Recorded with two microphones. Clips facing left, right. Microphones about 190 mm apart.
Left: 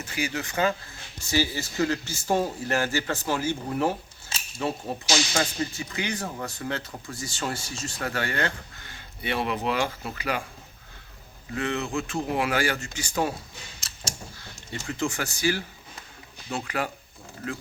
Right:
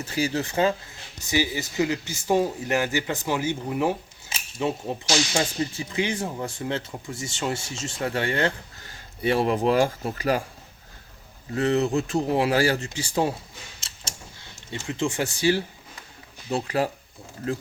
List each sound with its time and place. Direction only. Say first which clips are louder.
0.0 s speech: right 5 dB; 35° right (ahead or behind)
1.3 s a man's voice: right 1 dB; 15° right (ahead or behind); by 10.4 s 40° right (ahead or behind)
11.5 s speech: right 6 dB; 40° right (ahead or behind)
14.3 s speech: right 1 dB; 25° right (ahead or behind)